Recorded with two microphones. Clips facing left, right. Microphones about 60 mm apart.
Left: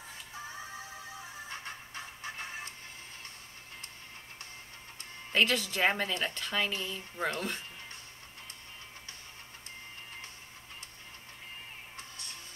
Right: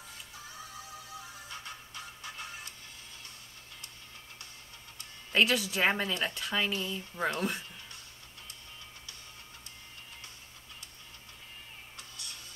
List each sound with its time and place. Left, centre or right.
0.5 s music: left
5.3 s speech: centre
6.9 s speech: right
12.0 s music: left